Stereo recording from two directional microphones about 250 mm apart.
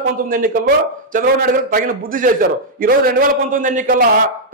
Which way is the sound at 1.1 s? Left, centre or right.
Right.